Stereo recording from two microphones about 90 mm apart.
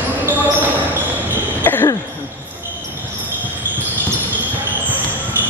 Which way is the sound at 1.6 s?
25° left (ahead or behind).